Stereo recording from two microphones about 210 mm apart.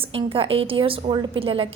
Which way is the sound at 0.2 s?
25° right (ahead or behind).